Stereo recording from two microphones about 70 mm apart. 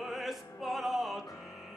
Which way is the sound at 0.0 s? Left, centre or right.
Centre.